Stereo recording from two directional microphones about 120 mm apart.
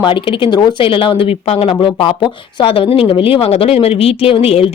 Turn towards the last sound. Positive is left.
turn(degrees=55)  # may be behind; listen again after turning